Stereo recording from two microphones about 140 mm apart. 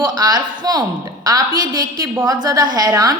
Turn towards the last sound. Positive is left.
turn(degrees=-25)  # may be behind; listen again after turning